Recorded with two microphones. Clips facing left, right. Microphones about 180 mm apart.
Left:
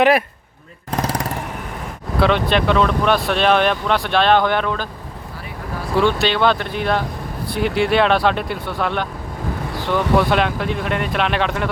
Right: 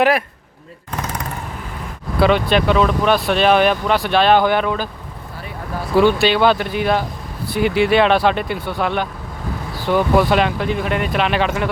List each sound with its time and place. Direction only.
1.0 s vehicle: 35° left (ahead or behind)
2.2 s speech: centre (ahead or behind)
6.0 s speech: 5° right (ahead or behind)